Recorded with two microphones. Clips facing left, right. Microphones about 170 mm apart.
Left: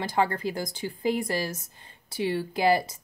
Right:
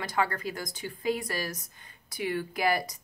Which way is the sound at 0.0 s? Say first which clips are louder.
Left 4 dB; 30° left (ahead or behind).